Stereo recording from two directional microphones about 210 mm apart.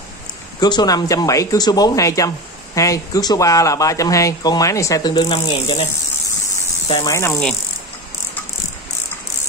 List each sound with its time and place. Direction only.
0.6 s speech: 20° left (ahead or behind)
6.9 s speech: 15° left (ahead or behind)